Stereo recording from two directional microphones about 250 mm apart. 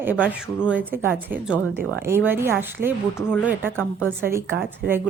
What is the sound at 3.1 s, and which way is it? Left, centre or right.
Speech, centre.